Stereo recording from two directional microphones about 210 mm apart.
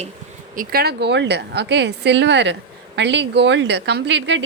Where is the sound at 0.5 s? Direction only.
45° right (ahead or behind).